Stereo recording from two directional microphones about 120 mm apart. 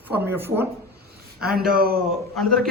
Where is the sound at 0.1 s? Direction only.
15° right (ahead or behind).